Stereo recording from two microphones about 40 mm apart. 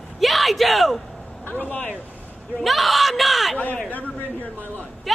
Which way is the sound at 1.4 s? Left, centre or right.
Left.